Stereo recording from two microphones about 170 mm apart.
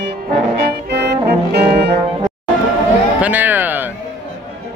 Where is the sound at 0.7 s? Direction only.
75° right (ahead or behind).